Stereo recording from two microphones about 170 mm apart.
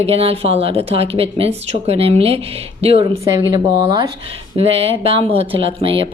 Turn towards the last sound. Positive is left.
turn(degrees=-35)  # may be behind; listen again after turning